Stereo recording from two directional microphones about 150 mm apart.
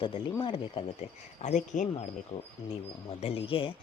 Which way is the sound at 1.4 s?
55° left (ahead or behind).